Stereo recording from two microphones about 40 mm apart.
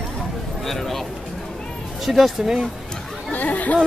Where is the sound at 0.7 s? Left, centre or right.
Centre.